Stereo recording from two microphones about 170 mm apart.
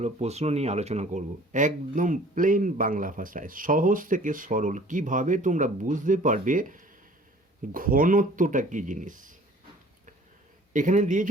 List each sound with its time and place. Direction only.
0.0 s speech: 40° right (ahead or behind)
10.7 s speech: 50° right (ahead or behind)